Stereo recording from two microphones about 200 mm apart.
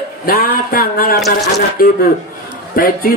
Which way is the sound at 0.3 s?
45° left (ahead or behind).